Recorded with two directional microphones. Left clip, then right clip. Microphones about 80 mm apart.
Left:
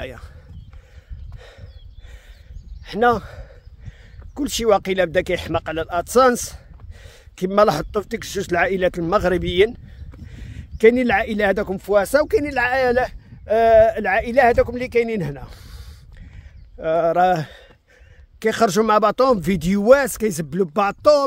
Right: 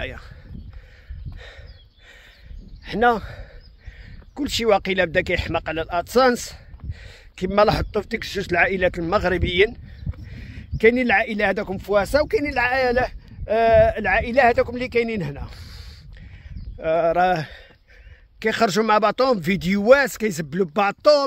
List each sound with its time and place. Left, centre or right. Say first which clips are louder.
0.0 s speech: right 1 dB; left
2.8 s a sound: left 1 dB; left
4.4 s speech: left 1 dB; left
8.5 s speech: even; left
13.5 s speech: left 2 dB; left
14.7 s speech: left 2 dB; left